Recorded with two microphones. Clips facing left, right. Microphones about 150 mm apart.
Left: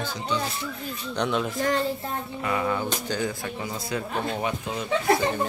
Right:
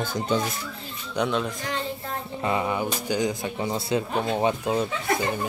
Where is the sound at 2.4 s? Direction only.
20° right (ahead or behind).